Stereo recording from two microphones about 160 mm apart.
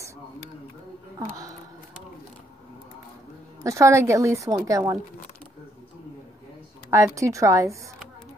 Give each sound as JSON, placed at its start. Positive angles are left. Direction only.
{"t": 3.6, "sound": "a woman's voice", "side_deg": -20}
{"t": 6.9, "sound": "a woman's voice", "side_deg": -20}